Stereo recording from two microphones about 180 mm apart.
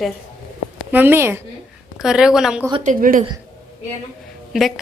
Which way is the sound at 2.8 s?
50° right (ahead or behind).